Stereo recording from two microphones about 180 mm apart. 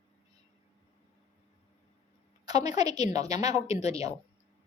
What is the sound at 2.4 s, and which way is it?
A woman's voice, 20° right (ahead or behind).